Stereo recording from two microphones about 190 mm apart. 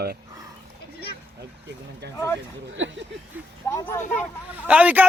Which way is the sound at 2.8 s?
75° right (ahead or behind).